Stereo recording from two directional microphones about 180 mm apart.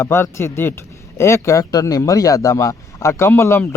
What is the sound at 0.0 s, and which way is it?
Speech, 15° left (ahead or behind).